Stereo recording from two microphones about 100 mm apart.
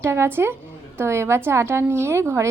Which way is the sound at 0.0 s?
25° right (ahead or behind).